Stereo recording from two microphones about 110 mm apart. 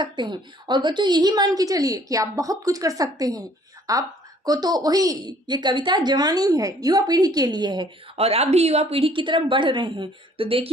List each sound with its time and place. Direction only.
0.0 s a woman's voice: 45° right (ahead or behind)
8.1 s a woman's voice: 70° right (ahead or behind)